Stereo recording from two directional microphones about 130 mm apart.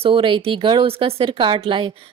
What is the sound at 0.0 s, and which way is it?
A woman's voice, 45° right (ahead or behind).